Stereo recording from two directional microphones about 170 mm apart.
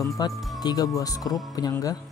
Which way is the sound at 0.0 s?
25° left (ahead or behind).